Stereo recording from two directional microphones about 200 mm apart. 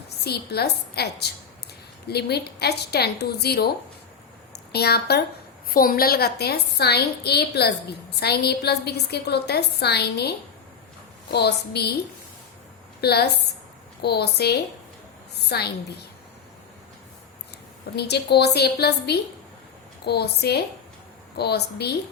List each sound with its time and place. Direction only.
0.3 s a woman's voice: 55° left (ahead or behind)
13.0 s a woman's voice: 55° left (ahead or behind)
17.9 s a woman's voice: 55° left (ahead or behind)